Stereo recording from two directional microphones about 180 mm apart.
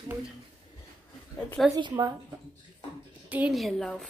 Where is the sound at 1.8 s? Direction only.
25° right (ahead or behind).